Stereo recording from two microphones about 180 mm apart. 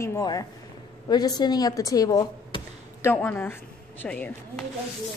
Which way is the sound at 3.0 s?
10° left (ahead or behind).